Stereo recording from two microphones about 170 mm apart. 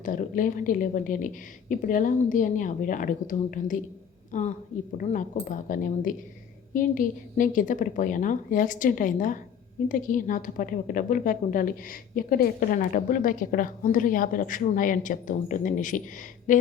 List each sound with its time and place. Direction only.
0.0 s a woman's voice: 50° left (ahead or behind)